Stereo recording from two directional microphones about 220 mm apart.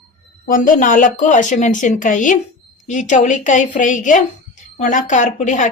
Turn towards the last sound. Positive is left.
turn(degrees=35)  # may be behind; listen again after turning